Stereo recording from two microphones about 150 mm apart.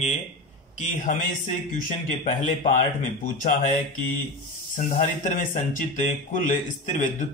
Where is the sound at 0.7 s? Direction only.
55° left (ahead or behind).